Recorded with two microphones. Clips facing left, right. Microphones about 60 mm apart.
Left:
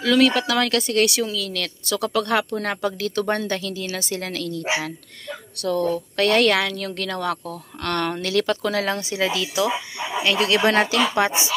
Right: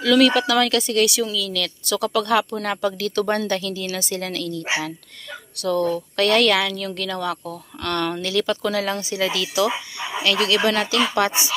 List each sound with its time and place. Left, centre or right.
0.0 s speech: left
9.2 s speech: centre
10.4 s speech: left
11.2 s speech: centre